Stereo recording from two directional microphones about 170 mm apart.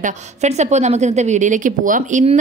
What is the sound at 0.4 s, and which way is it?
A woman's voice, 40° right (ahead or behind).